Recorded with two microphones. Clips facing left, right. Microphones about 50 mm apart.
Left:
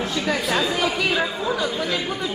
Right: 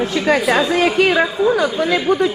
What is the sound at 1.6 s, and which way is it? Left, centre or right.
Speech, right.